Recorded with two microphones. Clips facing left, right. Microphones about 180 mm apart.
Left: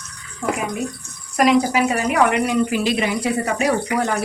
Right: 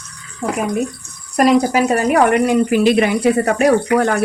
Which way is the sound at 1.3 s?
45° right (ahead or behind).